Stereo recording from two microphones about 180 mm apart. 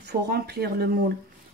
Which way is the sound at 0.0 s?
60° right (ahead or behind).